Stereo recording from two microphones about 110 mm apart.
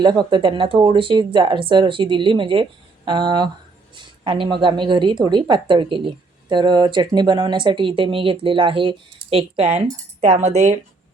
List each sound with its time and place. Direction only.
0.0 s speech: 45° right (ahead or behind); by 9.6 s 60° right (ahead or behind)
9.7 s speech: 90° right